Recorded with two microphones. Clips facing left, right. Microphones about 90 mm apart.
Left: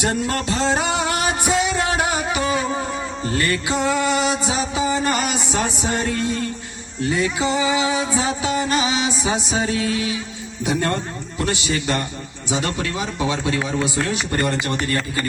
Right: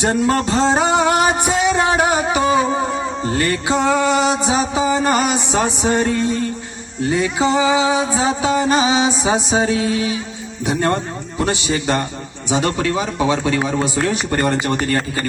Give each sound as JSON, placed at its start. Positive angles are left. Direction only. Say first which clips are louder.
{"t": 0.0, "sound": "speech", "louder": "right 5 dB", "side_deg": -30}
{"t": 1.6, "sound": "music", "louder": "right 5 dB", "side_deg": -30}
{"t": 12.5, "sound": "speech", "louder": "right 6 dB", "side_deg": -30}
{"t": 14.7, "sound": "speech", "louder": "right 4 dB", "side_deg": -30}